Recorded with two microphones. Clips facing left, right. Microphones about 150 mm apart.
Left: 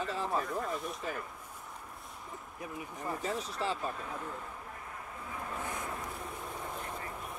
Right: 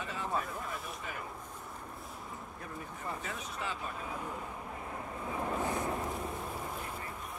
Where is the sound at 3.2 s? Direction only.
35° left (ahead or behind).